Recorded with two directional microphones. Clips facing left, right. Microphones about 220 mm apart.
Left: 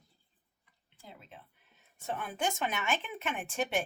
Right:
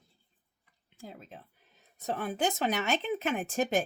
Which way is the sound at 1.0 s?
45° right (ahead or behind).